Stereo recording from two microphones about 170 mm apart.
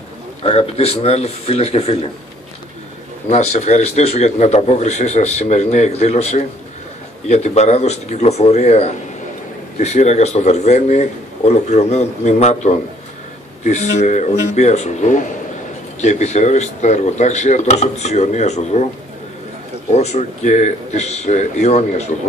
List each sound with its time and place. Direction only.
0.4 s a man's voice: 35° left (ahead or behind)
3.3 s a man's voice: 40° left (ahead or behind)
19.9 s a man's voice: 40° left (ahead or behind)